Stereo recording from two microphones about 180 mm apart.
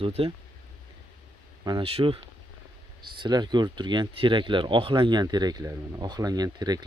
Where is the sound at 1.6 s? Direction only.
25° right (ahead or behind).